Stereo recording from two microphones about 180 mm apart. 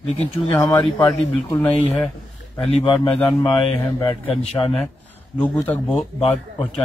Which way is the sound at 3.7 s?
25° left (ahead or behind).